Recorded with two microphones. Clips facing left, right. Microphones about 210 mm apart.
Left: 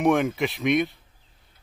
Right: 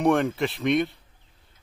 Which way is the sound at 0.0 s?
Centre (ahead or behind).